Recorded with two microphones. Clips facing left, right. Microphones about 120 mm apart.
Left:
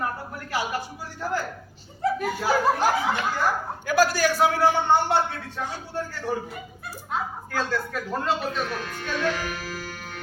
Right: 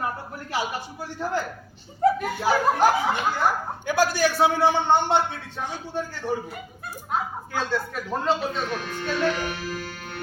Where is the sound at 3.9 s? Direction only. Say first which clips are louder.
Left 1 dB; 20° right (ahead or behind).